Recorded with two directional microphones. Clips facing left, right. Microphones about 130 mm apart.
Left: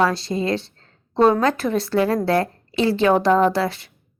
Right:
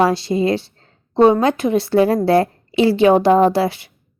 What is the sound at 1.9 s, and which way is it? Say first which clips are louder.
A woman's voice: right 5 dB; 30° right (ahead or behind).